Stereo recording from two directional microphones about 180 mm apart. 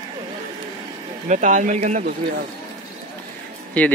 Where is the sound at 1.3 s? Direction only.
40° right (ahead or behind).